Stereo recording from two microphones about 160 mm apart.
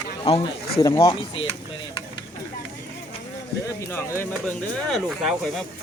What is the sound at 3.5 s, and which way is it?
Speech, 85° left.